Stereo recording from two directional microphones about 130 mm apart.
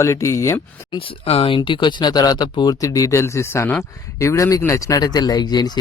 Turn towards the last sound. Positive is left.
turn(degrees=30)  # may be behind; listen again after turning